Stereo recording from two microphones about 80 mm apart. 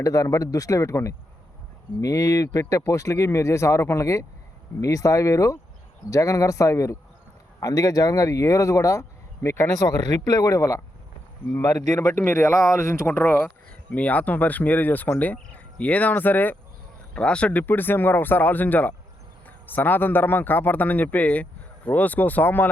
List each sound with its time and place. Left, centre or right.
0.0 s speech: left